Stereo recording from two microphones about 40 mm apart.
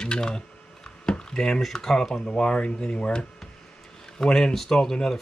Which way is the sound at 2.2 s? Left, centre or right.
Left.